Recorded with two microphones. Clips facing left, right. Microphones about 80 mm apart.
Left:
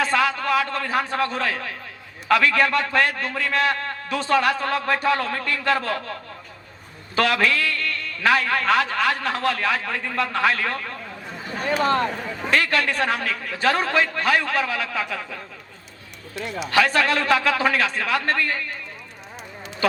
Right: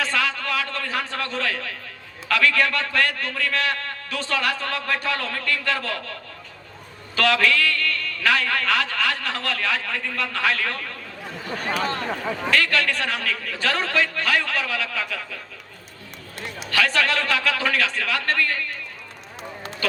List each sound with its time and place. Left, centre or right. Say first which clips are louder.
0.0 s a sound: left 4 dB; left
2.3 s a man's voice: left 2 dB; left
7.2 s a man's voice: even; left
16.6 s a man's voice: left 2 dB; left
19.8 s a man's voice: left 4 dB; left